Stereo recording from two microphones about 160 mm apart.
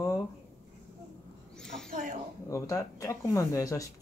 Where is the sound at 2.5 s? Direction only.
20° left (ahead or behind).